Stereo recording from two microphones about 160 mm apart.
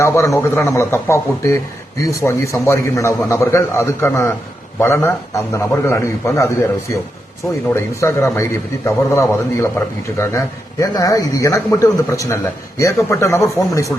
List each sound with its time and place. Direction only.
0.0 s a man's voice: 15° left (ahead or behind)